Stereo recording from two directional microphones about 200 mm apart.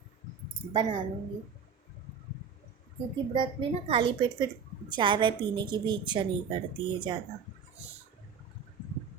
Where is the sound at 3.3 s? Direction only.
25° right (ahead or behind).